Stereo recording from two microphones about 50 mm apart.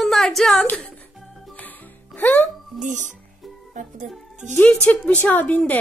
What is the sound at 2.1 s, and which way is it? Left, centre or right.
Speech, left.